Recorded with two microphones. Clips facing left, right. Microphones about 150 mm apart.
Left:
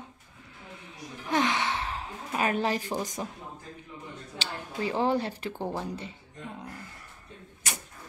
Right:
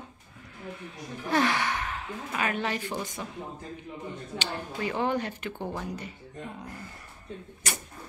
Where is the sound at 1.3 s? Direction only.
20° left (ahead or behind); by 3.0 s 35° left (ahead or behind).